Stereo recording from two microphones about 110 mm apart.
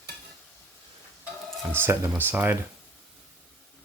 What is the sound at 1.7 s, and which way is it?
Speech, 20° right (ahead or behind).